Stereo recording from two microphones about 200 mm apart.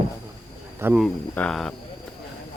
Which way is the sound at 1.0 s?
5° left (ahead or behind).